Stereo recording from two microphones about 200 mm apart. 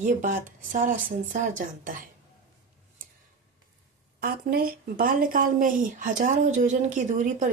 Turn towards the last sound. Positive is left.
turn(degrees=-40)  # may be behind; listen again after turning